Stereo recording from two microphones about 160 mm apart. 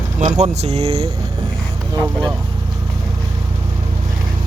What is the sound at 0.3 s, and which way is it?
Speech, 45° right (ahead or behind).